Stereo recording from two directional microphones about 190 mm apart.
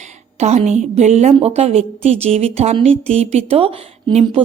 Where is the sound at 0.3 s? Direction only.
35° right (ahead or behind).